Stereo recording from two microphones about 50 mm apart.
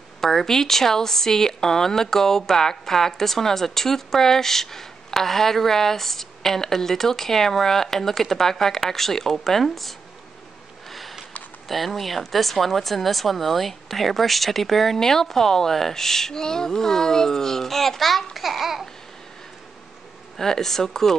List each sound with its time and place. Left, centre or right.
0.2 s speech: centre
10.9 s sniff: centre
11.7 s speech: centre
20.3 s speech: centre